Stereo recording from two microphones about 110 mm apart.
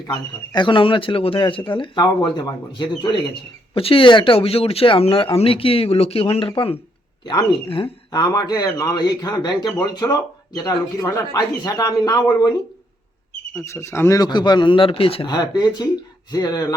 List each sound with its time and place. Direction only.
0.1 s speech: 45° left (ahead or behind)
3.8 s speech: 55° left (ahead or behind); by 12.5 s 40° left (ahead or behind)
13.7 s speech: 25° left (ahead or behind)
14.2 s speech: 40° left (ahead or behind); by 15.3 s 55° left (ahead or behind)
15.3 s speech: 40° left (ahead or behind)